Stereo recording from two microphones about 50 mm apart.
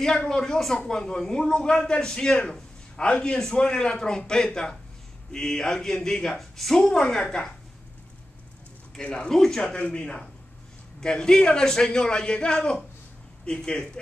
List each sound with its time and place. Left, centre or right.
0.3 s a man's voice: centre
8.9 s a man's voice: centre
9.8 s a man's voice: left